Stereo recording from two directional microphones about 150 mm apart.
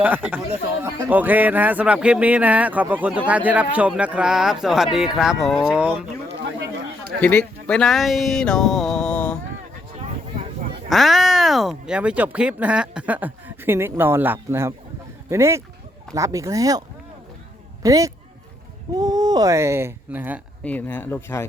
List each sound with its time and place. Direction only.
0.0 s speech: 10° right (ahead or behind)
7.2 s speech: 10° left (ahead or behind)
10.8 s speech: centre (ahead or behind); by 16.8 s 25° right (ahead or behind)
17.8 s speech: 20° right (ahead or behind)
20.7 s speech: 10° left (ahead or behind)